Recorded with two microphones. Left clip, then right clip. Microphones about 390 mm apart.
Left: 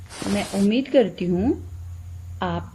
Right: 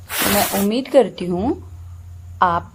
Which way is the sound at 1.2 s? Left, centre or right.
Right.